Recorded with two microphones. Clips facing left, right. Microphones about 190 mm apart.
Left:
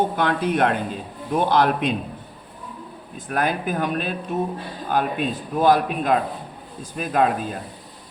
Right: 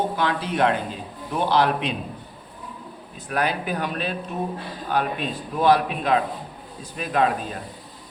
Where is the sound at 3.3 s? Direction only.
45° left (ahead or behind).